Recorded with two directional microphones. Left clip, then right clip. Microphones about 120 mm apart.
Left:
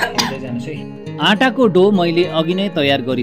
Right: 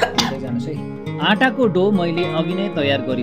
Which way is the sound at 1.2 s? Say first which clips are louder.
Left 3 dB; 30° left (ahead or behind).